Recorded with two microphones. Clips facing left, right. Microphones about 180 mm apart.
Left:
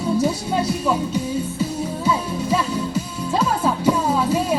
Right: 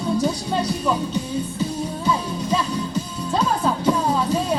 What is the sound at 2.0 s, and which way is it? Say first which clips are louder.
Music: left 2 dB; 5° left (ahead or behind).